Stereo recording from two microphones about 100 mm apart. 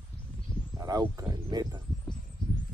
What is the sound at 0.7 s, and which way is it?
Speech, 40° right (ahead or behind).